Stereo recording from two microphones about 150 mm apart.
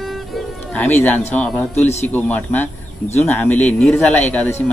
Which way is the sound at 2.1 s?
10° left (ahead or behind).